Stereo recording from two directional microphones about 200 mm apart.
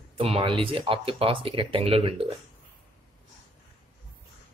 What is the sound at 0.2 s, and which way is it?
Speech, 25° right (ahead or behind).